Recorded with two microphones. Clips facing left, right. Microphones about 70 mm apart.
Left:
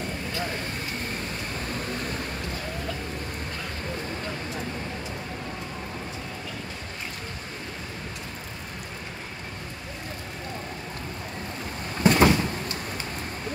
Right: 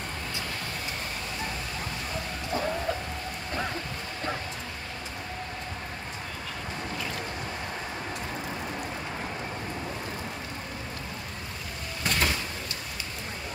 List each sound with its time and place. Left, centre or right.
12.0 s cupboard open or close: left